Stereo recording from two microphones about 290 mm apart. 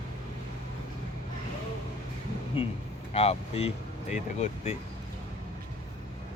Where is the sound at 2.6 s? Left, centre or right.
Centre.